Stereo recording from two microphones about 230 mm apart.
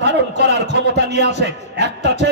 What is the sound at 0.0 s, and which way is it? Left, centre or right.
A man's voice, right.